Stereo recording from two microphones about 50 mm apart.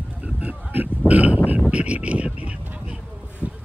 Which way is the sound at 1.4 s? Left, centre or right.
Right.